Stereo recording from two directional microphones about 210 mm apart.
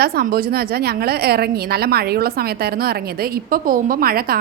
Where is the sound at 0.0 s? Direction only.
45° right (ahead or behind).